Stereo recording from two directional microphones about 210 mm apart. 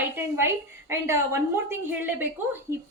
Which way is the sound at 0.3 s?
10° right (ahead or behind).